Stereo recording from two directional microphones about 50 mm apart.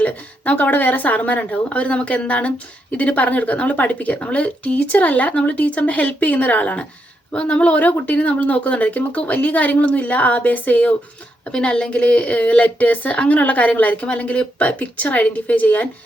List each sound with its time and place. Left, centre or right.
0.0 s speech: left
11.5 s a woman's voice: centre